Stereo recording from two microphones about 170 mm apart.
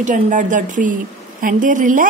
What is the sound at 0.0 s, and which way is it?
A woman's voice, 50° right (ahead or behind).